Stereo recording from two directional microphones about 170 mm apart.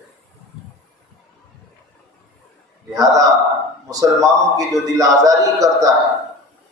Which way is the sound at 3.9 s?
20° right (ahead or behind).